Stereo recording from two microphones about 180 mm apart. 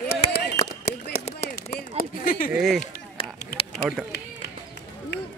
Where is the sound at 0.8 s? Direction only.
55° left (ahead or behind).